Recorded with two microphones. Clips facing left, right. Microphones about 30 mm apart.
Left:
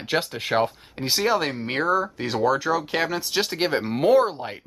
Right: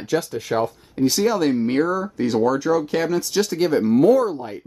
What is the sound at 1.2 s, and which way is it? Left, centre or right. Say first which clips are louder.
Speech: right 1 dB; left.